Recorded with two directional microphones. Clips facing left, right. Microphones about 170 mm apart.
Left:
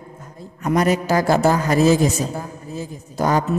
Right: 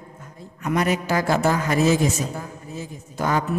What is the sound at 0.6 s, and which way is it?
A man's voice, 40° left (ahead or behind).